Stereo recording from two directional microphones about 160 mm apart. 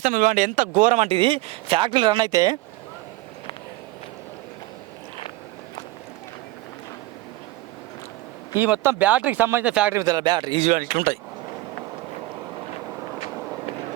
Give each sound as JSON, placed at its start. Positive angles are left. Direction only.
{"t": 0.0, "sound": "speech", "side_deg": -55}
{"t": 8.5, "sound": "speech", "side_deg": -10}
{"t": 9.9, "sound": "speech", "side_deg": -25}
{"t": 10.6, "sound": "speech", "side_deg": -55}